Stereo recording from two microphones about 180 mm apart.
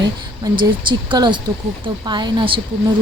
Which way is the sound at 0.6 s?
25° right (ahead or behind).